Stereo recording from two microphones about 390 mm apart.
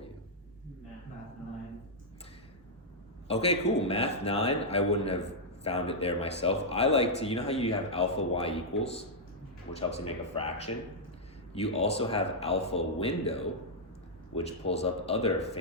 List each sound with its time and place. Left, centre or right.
3.2 s a man's voice: centre